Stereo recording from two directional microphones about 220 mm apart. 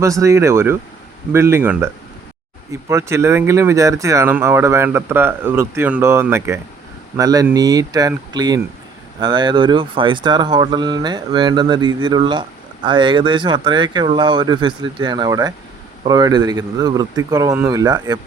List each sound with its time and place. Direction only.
0.0 s speech: 15° right (ahead or behind)
2.9 s speech: 10° right (ahead or behind)